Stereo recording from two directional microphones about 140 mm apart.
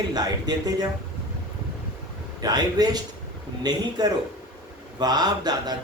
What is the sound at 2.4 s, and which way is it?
A man's voice, 30° right (ahead or behind).